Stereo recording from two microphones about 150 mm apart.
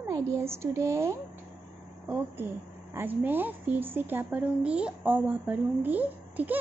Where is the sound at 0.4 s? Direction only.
15° right (ahead or behind).